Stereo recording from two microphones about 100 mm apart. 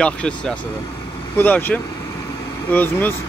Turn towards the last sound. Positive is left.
turn(degrees=20)  # may be behind; listen again after turning